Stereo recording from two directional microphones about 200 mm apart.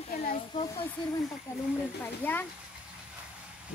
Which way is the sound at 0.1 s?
45° left (ahead or behind).